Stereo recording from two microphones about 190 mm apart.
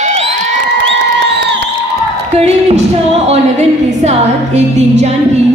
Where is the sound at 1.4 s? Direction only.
60° right (ahead or behind).